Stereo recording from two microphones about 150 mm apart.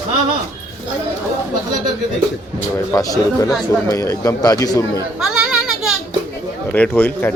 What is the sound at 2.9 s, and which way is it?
A man's voice, 25° left (ahead or behind).